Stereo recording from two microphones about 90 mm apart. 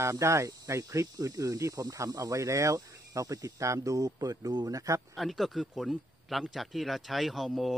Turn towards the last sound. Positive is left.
turn(degrees=0)  # may be behind; listen again after turning